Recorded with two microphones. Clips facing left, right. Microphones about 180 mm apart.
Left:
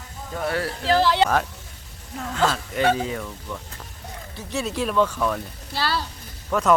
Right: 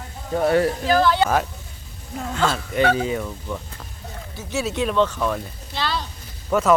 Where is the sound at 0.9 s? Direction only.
25° left (ahead or behind).